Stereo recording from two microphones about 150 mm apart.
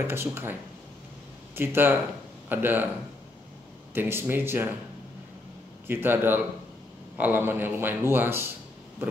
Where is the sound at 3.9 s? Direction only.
15° right (ahead or behind).